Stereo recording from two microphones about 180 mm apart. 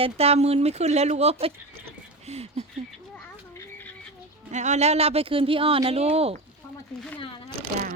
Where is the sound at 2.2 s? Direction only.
35° right (ahead or behind).